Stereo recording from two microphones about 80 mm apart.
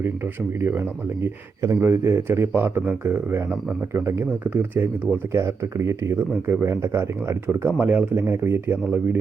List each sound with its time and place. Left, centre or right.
1.2 s speech: right
4.5 s speech: right